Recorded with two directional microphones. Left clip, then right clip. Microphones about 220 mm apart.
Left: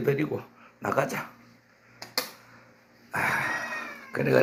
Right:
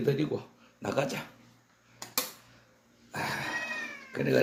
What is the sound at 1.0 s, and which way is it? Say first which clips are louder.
Speech: left 3 dB; centre (ahead or behind).